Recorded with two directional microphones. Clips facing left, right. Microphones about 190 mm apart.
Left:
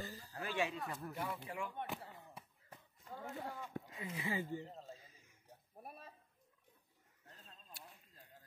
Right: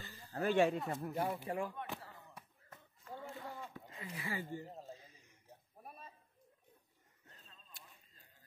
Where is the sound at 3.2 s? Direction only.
50° left (ahead or behind).